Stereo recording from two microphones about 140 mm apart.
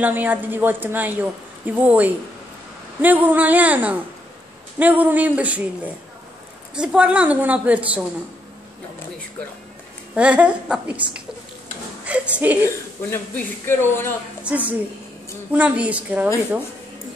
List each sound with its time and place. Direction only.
0.0 s a woman's voice: 10° right (ahead or behind)
6.7 s a woman's voice: 5° right (ahead or behind)
10.1 s a woman's voice: 10° right (ahead or behind)
12.1 s a woman's voice: 10° right (ahead or behind)
12.6 s speech: 20° left (ahead or behind)
14.4 s a woman's voice: 10° right (ahead or behind)